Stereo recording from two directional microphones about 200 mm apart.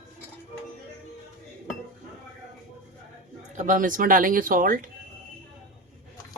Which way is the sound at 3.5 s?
40° right (ahead or behind).